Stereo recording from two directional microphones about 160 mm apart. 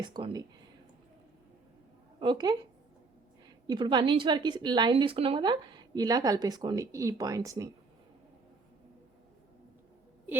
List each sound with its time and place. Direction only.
0.0 s a woman's voice: 25° right (ahead or behind)
2.1 s a woman's voice: 25° right (ahead or behind)
3.7 s a woman's voice: 30° right (ahead or behind)